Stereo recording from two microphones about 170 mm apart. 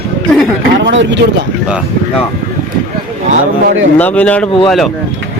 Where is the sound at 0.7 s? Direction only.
90° right.